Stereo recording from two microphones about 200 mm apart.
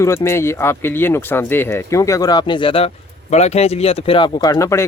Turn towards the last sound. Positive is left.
turn(degrees=15)  # may be behind; listen again after turning